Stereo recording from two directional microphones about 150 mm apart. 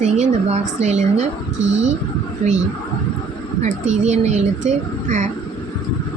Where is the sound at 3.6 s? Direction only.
50° right (ahead or behind).